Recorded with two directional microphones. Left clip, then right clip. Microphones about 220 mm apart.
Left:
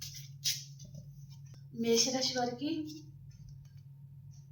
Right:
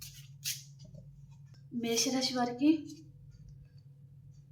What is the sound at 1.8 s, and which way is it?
Speech, 35° right (ahead or behind).